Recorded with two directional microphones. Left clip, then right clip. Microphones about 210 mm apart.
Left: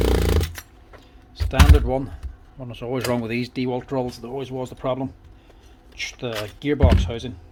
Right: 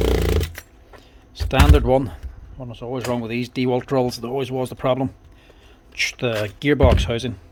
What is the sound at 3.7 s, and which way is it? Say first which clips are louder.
Speech: right 8 dB; 40° right (ahead or behind).